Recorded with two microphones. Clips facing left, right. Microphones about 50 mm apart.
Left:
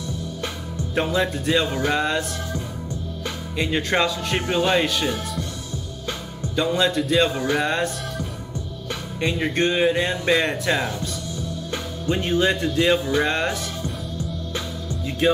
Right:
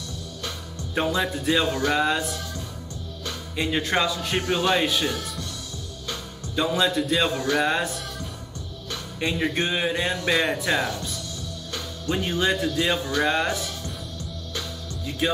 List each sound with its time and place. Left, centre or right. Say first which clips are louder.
0.9 s speech: left 2 dB; centre
1.7 s speech: left 1 dB; centre
2.0 s speech: even; centre
3.5 s speech: left 2 dB; centre
6.5 s speech: left 2 dB; centre
7.3 s speech: left 1 dB; centre
7.6 s speech: left 1 dB; centre
10.8 s speech: left 1 dB; centre
12.1 s speech: left 3 dB; centre